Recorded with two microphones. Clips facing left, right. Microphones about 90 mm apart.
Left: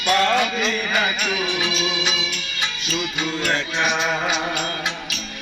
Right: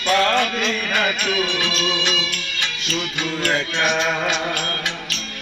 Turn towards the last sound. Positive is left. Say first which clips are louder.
# right 1 dB
turn(degrees=5)  # may be behind; listen again after turning